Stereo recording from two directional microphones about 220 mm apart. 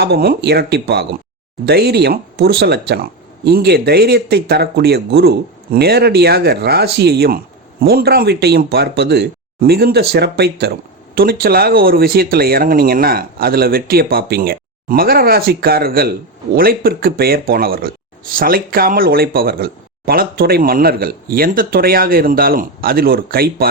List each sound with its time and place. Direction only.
0.0 s speech: 45° right (ahead or behind)